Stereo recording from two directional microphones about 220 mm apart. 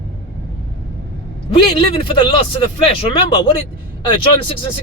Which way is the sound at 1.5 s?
25° left (ahead or behind).